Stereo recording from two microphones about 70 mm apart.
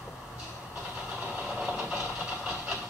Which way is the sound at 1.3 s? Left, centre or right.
Centre.